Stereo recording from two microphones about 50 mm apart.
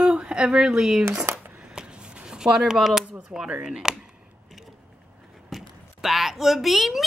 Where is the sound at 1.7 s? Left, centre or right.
Centre.